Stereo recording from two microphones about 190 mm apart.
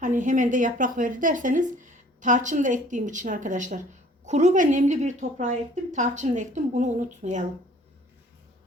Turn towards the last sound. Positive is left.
turn(degrees=-40)  # may be behind; listen again after turning